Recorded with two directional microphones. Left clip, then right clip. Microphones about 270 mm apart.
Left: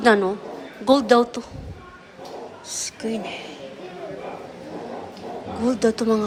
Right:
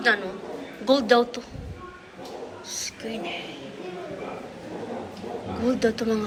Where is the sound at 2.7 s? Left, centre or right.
Centre.